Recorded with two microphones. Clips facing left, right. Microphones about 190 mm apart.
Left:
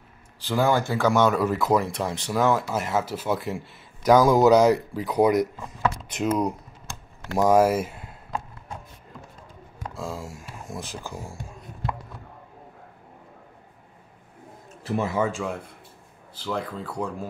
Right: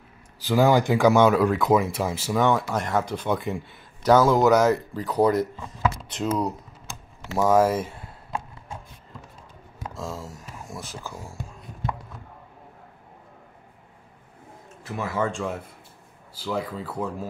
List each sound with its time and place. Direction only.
0.4 s speech: 10° right (ahead or behind)
1.4 s speech: centre (ahead or behind)
4.0 s speech: 15° left (ahead or behind)
9.9 s speech: 10° left (ahead or behind)
14.8 s a sound: 35° left (ahead or behind)
15.0 s speech: 10° left (ahead or behind)